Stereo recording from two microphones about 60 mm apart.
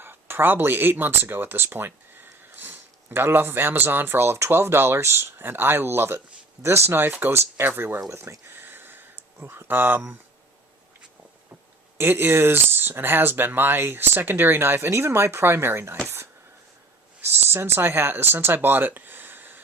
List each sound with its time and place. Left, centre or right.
0.0 s speech: right
8.4 s a sound: right
11.9 s speech: right